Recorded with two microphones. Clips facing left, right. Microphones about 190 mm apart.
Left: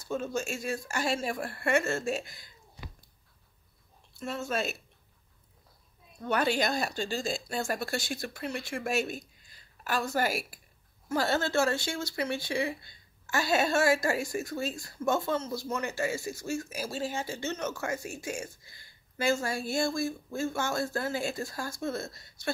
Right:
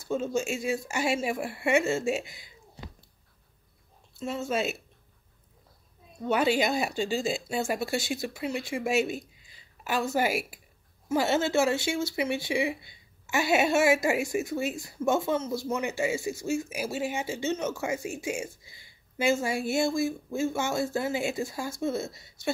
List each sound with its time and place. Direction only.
0.1 s speech: 10° right (ahead or behind)
4.2 s speech: 5° right (ahead or behind)
6.3 s speech: 5° right (ahead or behind)